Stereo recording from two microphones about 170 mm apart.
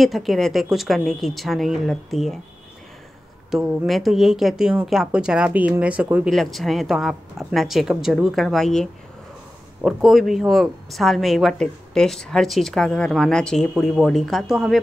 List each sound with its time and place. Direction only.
0.0 s speech: centre (ahead or behind)
3.4 s speech: centre (ahead or behind)
9.8 s speech: centre (ahead or behind)